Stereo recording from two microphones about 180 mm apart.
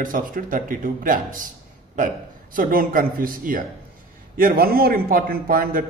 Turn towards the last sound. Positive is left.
turn(degrees=-55)  # may be behind; listen again after turning